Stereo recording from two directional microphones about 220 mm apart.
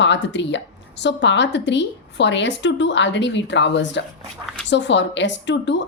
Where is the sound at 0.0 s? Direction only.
55° left (ahead or behind).